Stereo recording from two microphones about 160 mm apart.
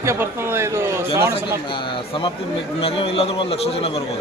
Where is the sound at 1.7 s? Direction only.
30° left (ahead or behind).